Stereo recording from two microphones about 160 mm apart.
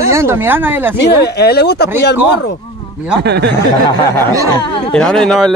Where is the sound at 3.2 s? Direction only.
90° right.